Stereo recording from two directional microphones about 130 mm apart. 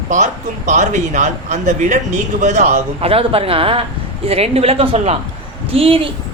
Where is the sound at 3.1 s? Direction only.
45° right (ahead or behind).